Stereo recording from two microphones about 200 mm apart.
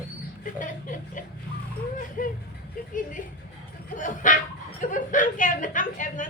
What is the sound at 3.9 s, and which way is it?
A woman's voice, 40° left (ahead or behind).